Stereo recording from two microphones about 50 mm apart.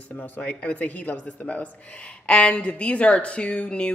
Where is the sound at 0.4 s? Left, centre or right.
Left.